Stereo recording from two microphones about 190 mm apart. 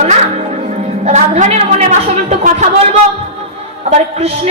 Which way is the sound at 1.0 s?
35° right (ahead or behind).